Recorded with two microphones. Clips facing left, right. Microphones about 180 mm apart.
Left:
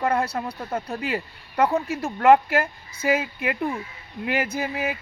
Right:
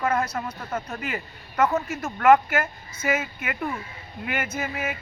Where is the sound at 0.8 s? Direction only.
30° left (ahead or behind).